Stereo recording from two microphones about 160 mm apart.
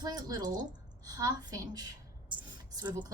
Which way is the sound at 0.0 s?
25° right (ahead or behind).